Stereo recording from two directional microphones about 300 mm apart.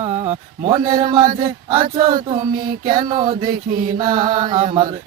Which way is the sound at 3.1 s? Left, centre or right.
Centre.